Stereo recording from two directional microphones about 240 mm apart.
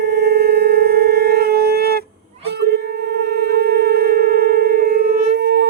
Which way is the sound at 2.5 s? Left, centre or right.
Right.